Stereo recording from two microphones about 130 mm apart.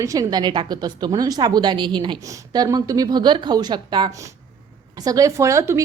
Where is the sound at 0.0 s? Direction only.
25° right (ahead or behind).